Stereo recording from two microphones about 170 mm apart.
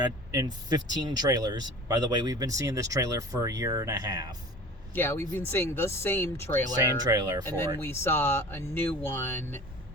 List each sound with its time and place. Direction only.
0.0 s speech: 25° right (ahead or behind)
4.9 s speech: 10° left (ahead or behind)
7.0 s speech: 25° right (ahead or behind)
7.4 s speech: 15° left (ahead or behind)